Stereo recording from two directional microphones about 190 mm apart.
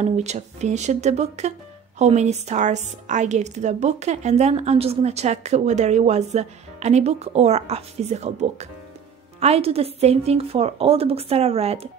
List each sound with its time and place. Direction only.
0.0 s a woman's voice: 35° right (ahead or behind)